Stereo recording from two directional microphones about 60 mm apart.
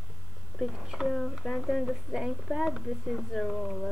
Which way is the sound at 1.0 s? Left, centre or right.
Centre.